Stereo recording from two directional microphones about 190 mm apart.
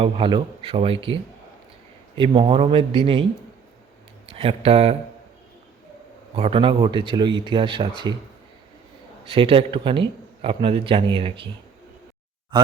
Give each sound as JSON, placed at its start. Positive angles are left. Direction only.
{"t": 0.0, "sound": "a man's voice", "side_deg": -25}
{"t": 4.3, "sound": "speech", "side_deg": -30}
{"t": 6.3, "sound": "a man's voice", "side_deg": -30}
{"t": 9.3, "sound": "a man's voice", "side_deg": -30}
{"t": 12.5, "sound": "a man's voice", "side_deg": -25}